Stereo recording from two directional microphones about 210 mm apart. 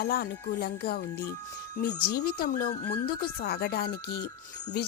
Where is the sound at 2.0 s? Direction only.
45° left (ahead or behind).